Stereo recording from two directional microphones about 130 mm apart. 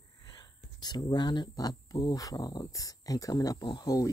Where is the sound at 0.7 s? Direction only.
30° left (ahead or behind).